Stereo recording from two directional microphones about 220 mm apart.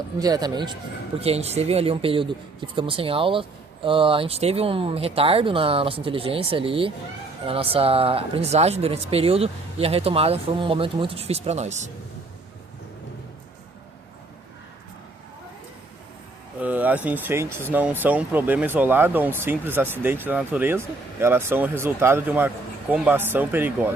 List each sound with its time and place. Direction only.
0.2 s speech: 15° right (ahead or behind)
16.6 s speech: 5° right (ahead or behind)